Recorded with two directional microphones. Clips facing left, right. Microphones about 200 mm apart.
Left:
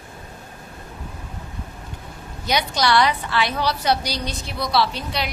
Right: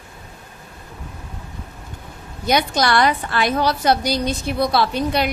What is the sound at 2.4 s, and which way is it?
A woman's voice, 50° right (ahead or behind).